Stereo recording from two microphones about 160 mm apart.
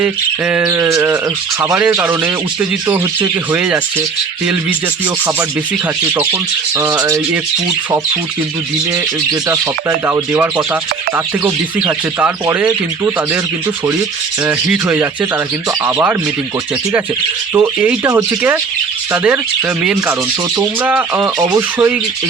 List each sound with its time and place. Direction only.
0.0 s speech: 10° right (ahead or behind)
0.6 s speech: 20° right (ahead or behind)
6.7 s speech: 25° right (ahead or behind)
10.1 s speech: 10° right (ahead or behind)
11.8 s speech: 10° right (ahead or behind)
14.4 s speech: 10° right (ahead or behind)
17.5 s speech: 15° right (ahead or behind)
21.2 s speech: 20° right (ahead or behind)